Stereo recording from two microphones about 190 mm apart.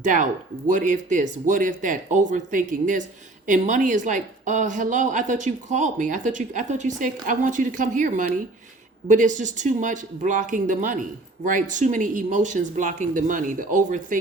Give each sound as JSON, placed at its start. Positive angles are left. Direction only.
{"t": 0.0, "sound": "a woman's voice", "side_deg": -40}